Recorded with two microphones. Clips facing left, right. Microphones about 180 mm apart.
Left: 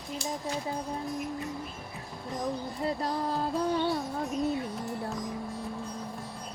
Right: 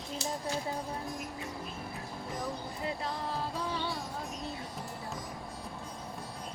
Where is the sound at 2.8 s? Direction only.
40° left (ahead or behind).